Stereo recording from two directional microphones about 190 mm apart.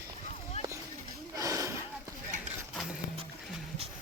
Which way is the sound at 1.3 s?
15° right (ahead or behind).